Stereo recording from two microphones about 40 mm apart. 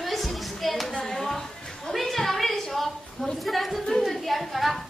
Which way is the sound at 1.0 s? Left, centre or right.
Centre.